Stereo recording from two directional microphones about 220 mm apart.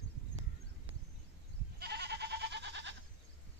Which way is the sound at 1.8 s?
50° right (ahead or behind).